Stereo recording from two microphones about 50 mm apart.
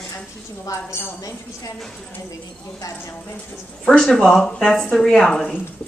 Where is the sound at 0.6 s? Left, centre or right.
Left.